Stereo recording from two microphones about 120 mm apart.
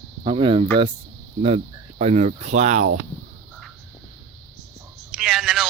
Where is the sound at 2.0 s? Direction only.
75° right (ahead or behind).